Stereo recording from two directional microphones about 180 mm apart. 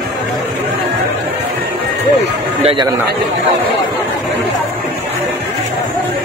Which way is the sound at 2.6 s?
30° right (ahead or behind).